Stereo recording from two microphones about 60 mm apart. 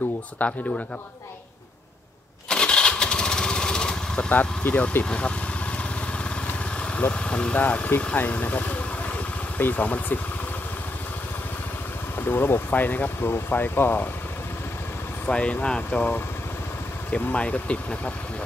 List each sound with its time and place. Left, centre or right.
0.4 s speech: centre
2.5 s lawn mower: centre
4.3 s speech: left
6.8 s speech: left
12.2 s speech: left
15.2 s speech: centre
17.1 s speech: centre